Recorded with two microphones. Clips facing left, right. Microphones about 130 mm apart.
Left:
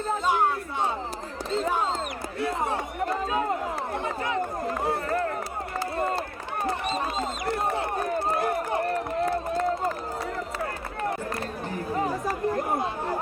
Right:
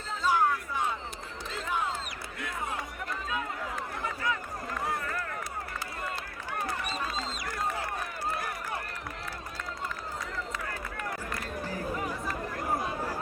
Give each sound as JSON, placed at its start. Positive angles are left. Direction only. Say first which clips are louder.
{"t": 0.3, "sound": "music", "louder": "even", "side_deg": 25}
{"t": 1.6, "sound": "a sound", "louder": "left 2 dB", "side_deg": 40}
{"t": 3.9, "sound": "run", "louder": "left 5 dB", "side_deg": 30}
{"t": 6.7, "sound": "a sound", "louder": "left 10 dB", "side_deg": 25}
{"t": 11.7, "sound": "chatter", "louder": "left 7 dB", "side_deg": 30}
{"t": 12.7, "sound": "chatter", "louder": "left 4 dB", "side_deg": 25}